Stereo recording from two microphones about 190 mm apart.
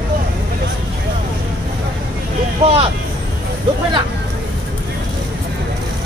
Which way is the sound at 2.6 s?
30° right (ahead or behind).